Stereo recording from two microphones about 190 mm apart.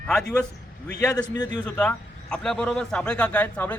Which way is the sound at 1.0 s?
20° left (ahead or behind).